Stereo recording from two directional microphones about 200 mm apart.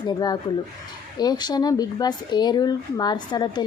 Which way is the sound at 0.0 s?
20° left (ahead or behind).